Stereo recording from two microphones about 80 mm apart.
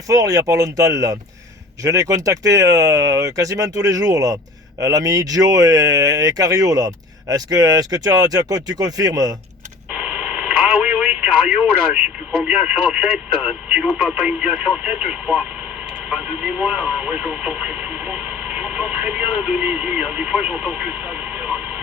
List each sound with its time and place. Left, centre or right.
0.1 s speech: right
9.9 s radio: centre
12.5 s speech: centre